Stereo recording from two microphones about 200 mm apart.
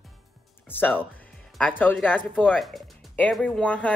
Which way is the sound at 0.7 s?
10° left (ahead or behind).